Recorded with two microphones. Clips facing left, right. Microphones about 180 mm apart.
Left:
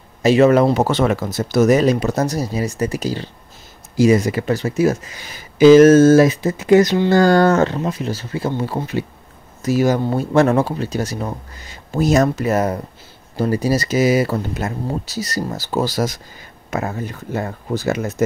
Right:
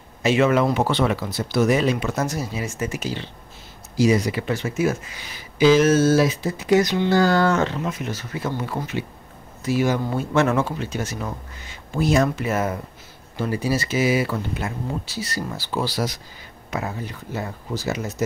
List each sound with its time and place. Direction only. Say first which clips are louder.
0.2 s speech: left 6 dB; 40° left (ahead or behind)
3.9 s speech: left 5 dB; 50° left (ahead or behind)